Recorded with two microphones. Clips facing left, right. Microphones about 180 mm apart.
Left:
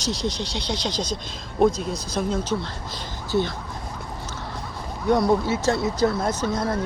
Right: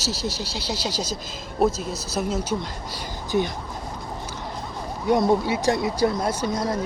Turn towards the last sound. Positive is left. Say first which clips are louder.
# even
turn(degrees=-10)  # may be behind; listen again after turning